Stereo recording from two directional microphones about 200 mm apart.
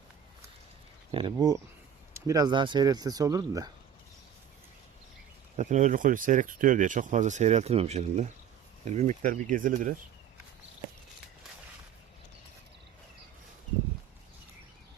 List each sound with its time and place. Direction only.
1.1 s speech: 20° right (ahead or behind)
5.5 s speech: 40° right (ahead or behind)